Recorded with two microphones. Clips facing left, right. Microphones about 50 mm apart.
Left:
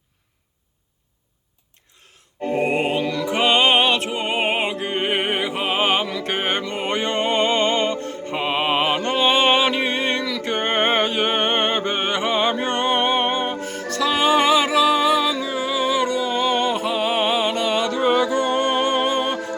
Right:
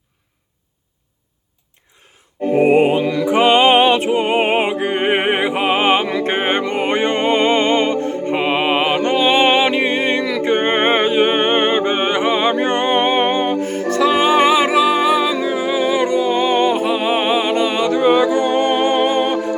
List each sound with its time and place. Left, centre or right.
2.4 s music: centre